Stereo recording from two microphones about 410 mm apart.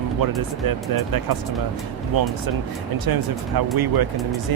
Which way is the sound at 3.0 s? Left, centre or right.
Right.